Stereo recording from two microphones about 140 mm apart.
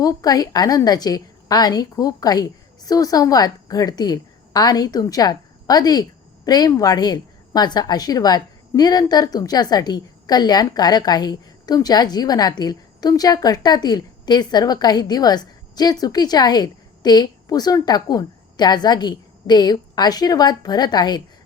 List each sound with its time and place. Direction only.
0.0 s a woman's voice: 25° left (ahead or behind)